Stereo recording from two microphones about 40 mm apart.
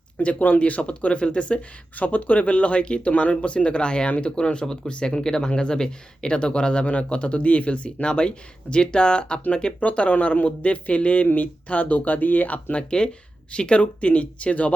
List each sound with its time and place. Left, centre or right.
0.2 s speech: left
2.0 s speech: left
4.6 s speech: centre
4.9 s speech: left
9.8 s speech: left
13.5 s speech: left